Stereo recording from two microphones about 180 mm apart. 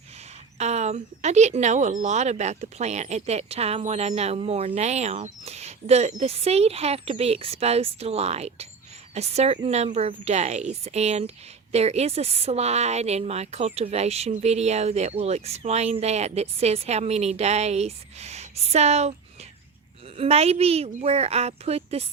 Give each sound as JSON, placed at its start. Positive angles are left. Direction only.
{"t": 0.6, "sound": "speech", "side_deg": -40}
{"t": 20.1, "sound": "speech", "side_deg": -35}